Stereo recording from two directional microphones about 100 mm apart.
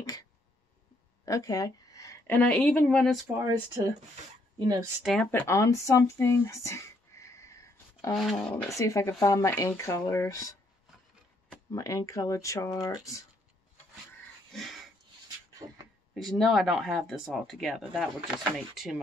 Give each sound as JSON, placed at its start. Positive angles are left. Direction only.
{"t": 1.2, "sound": "a sound", "side_deg": 35}
{"t": 2.2, "sound": "speech", "side_deg": 15}
{"t": 4.6, "sound": "speech", "side_deg": -40}
{"t": 5.2, "sound": "speech", "side_deg": 15}
{"t": 5.5, "sound": "a sound", "side_deg": 30}
{"t": 8.2, "sound": "speech", "side_deg": 0}
{"t": 8.7, "sound": "speech", "side_deg": 30}
{"t": 11.7, "sound": "speech", "side_deg": 30}
{"t": 14.5, "sound": "a sound", "side_deg": 0}
{"t": 16.2, "sound": "speech", "side_deg": 0}